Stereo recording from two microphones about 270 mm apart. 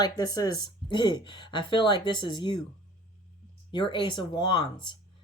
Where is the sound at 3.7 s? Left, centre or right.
Centre.